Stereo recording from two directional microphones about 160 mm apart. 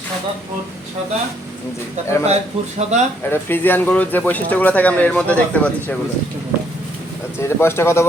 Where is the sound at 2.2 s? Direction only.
45° right (ahead or behind).